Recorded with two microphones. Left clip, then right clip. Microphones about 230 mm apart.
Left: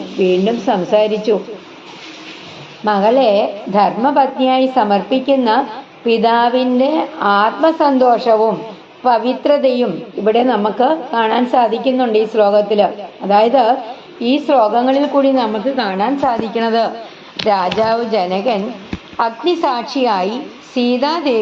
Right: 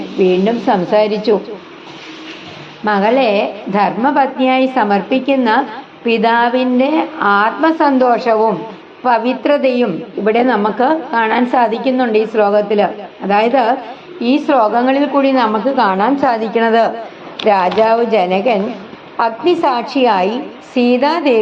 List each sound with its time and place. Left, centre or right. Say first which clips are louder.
0.2 s a woman's voice: right 1 dB; right
2.8 s a woman's voice: left 1 dB; right
15.4 s a woman's voice: right 4 dB; centre